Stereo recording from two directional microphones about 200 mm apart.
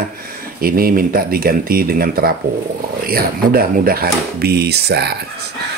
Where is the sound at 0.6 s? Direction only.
45° right (ahead or behind).